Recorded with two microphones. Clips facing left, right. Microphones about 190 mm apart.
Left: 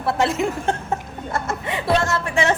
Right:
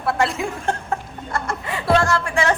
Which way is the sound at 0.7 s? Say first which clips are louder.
Left 1 dB; 20° left (ahead or behind).